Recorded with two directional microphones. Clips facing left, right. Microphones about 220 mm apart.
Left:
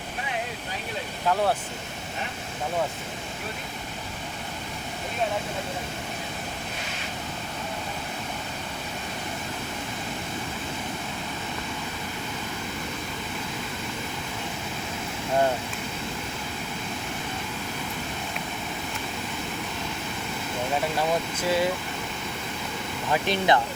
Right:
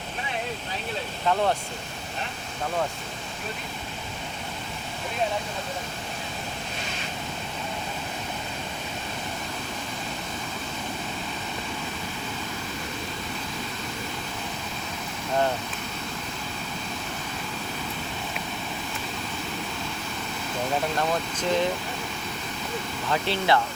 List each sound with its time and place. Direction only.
21.0 s speech: 10° left (ahead or behind)
23.1 s speech: 15° left (ahead or behind)